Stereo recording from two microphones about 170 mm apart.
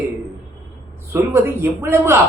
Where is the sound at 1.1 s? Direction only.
15° right (ahead or behind).